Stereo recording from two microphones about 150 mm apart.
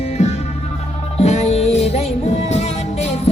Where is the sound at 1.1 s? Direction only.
50° left (ahead or behind).